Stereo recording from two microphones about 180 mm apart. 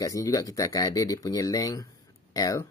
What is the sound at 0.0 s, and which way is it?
Speech, 20° left (ahead or behind).